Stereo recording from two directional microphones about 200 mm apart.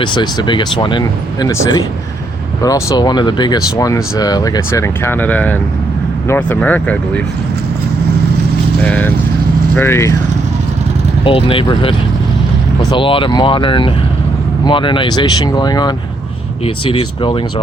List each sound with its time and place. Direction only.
0.0 s speech: 25° left (ahead or behind); by 7.2 s 5° left (ahead or behind)
8.8 s speech: 5° left (ahead or behind)
11.3 s speech: 25° left (ahead or behind)